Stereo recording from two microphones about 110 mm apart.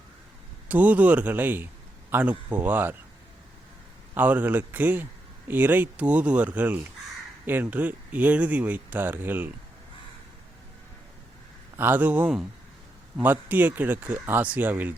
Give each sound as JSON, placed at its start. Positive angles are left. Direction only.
{"t": 0.7, "sound": "a man's voice", "side_deg": -15}
{"t": 4.1, "sound": "speech", "side_deg": -15}
{"t": 11.8, "sound": "speech", "side_deg": -15}